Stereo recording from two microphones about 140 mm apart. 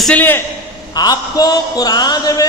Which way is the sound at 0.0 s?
10° left (ahead or behind).